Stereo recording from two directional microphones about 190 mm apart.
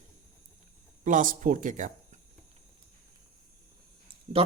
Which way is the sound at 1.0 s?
45° right (ahead or behind).